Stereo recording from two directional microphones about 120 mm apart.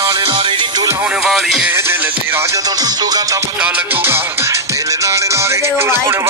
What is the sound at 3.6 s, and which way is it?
Music, 10° right (ahead or behind).